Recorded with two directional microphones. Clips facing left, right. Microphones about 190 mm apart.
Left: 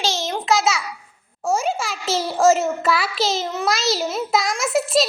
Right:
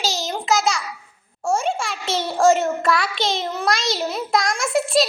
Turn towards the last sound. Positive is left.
turn(degrees=0)  # may be behind; listen again after turning